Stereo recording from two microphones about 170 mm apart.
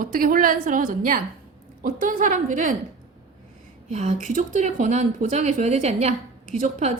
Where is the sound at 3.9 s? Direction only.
45° right (ahead or behind).